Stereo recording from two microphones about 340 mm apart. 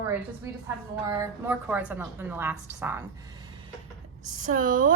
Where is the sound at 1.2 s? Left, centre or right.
Centre.